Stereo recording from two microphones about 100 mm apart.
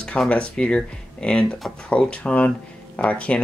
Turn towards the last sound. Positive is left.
turn(degrees=15)  # may be behind; listen again after turning